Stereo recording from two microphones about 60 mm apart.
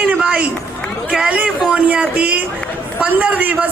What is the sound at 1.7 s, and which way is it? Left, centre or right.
A man's voice, centre.